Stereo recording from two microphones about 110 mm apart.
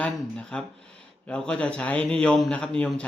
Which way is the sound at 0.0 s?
10° left (ahead or behind).